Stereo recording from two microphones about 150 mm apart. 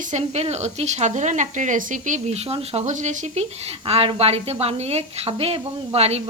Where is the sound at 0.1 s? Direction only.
50° right (ahead or behind).